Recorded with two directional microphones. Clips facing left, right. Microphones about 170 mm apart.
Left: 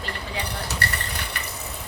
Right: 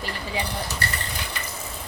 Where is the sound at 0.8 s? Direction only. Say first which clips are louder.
Left 1 dB; 65° left (ahead or behind).